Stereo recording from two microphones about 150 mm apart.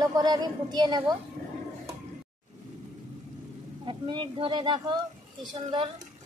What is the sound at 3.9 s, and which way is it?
A woman's voice, 30° right (ahead or behind).